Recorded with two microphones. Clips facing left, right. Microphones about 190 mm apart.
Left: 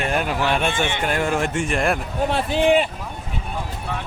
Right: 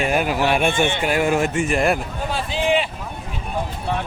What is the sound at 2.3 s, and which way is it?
Speech, 50° left (ahead or behind).